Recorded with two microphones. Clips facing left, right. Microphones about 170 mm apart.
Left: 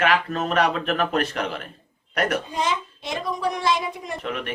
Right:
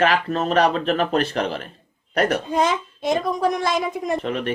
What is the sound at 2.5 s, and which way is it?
A woman's voice, 50° right (ahead or behind).